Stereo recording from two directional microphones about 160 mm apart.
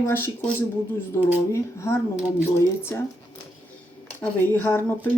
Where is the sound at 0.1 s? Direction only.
15° left (ahead or behind).